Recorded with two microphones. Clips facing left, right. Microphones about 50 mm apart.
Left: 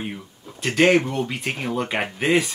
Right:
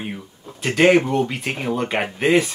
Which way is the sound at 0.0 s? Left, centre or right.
Centre.